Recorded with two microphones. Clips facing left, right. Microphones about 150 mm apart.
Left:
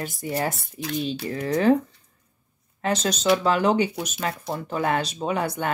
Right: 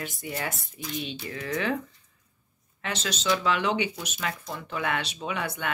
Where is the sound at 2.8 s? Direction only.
40° left (ahead or behind).